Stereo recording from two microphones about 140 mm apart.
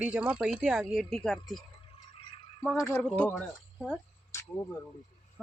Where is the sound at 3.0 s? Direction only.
5° left (ahead or behind).